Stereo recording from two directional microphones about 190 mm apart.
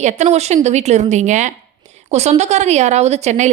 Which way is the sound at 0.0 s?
35° right (ahead or behind).